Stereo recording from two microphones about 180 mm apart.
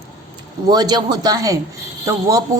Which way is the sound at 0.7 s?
20° right (ahead or behind).